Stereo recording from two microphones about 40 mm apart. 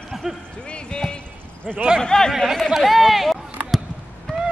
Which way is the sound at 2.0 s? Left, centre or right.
Centre.